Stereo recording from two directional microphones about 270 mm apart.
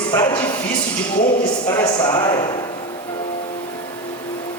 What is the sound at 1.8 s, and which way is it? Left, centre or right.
Speech, centre.